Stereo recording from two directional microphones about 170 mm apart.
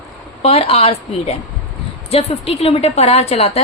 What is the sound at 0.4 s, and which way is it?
A woman's voice, 35° left (ahead or behind).